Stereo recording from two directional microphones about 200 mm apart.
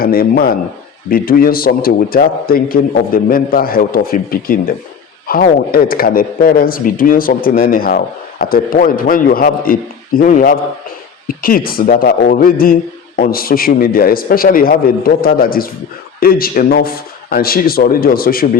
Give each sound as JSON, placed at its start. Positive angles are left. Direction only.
{"t": 0.0, "sound": "speech", "side_deg": 50}